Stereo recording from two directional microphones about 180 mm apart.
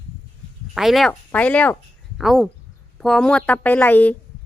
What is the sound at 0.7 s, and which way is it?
A woman's voice, centre (ahead or behind).